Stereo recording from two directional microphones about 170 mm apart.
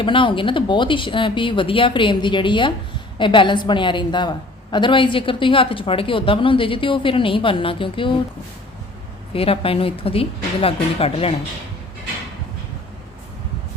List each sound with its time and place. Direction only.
0.0 s a woman's voice: 30° left (ahead or behind)
9.3 s a woman's voice: 35° left (ahead or behind)